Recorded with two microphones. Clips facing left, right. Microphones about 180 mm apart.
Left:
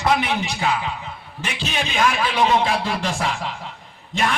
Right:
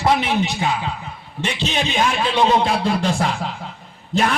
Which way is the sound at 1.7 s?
25° right (ahead or behind).